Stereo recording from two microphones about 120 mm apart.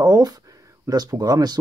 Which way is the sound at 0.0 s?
30° right (ahead or behind).